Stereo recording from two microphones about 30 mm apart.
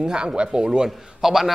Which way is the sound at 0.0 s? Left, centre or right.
Right.